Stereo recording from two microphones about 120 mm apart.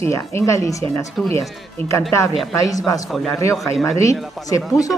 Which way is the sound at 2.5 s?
30° left (ahead or behind).